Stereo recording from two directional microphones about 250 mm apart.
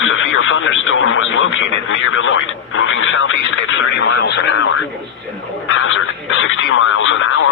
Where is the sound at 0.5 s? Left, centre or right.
Left.